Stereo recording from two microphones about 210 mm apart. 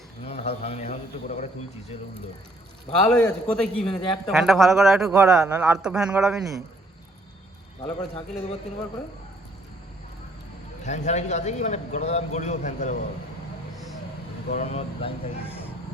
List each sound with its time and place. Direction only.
0.3 s a man's voice: 30° left (ahead or behind)
3.1 s a man's voice: 5° left (ahead or behind)
7.8 s a man's voice: 30° left (ahead or behind)
10.8 s a man's voice: 35° left (ahead or behind)
14.5 s a man's voice: 30° left (ahead or behind)